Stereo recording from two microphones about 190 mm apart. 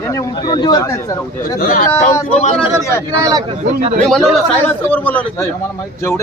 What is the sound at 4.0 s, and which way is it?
A man's voice, centre (ahead or behind).